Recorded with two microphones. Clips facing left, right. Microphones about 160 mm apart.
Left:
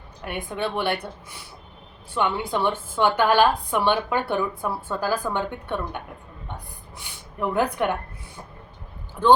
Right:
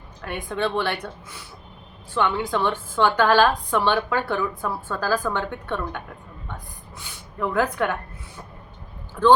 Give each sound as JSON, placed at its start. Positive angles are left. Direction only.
{"t": 0.4, "sound": "a woman's voice", "side_deg": 15}
{"t": 2.1, "sound": "a woman's voice", "side_deg": 15}
{"t": 7.3, "sound": "a woman's voice", "side_deg": 20}